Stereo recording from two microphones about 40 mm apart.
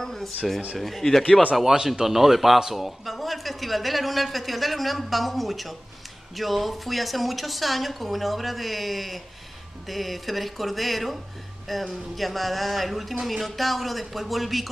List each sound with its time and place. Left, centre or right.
0.0 s a sound: centre
0.7 s a man's voice: centre
1.6 s a man's voice: centre